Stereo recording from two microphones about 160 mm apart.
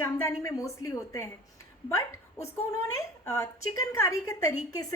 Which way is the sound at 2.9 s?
20° left (ahead or behind).